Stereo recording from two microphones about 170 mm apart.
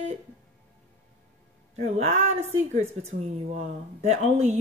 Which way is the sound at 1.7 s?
40° right (ahead or behind).